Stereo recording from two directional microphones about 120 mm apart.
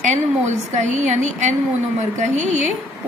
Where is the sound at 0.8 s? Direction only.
80° right.